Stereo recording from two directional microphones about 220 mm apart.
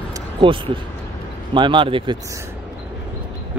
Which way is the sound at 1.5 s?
20° right (ahead or behind).